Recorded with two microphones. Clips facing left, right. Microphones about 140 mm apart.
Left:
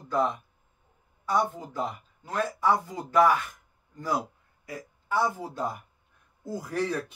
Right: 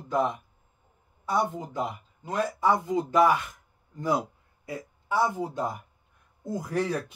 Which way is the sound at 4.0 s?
20° right (ahead or behind).